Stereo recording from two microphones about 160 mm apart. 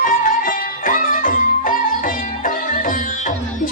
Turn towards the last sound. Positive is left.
turn(degrees=55)  # may be behind; listen again after turning